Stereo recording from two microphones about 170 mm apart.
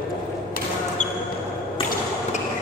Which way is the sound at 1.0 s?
45° left (ahead or behind).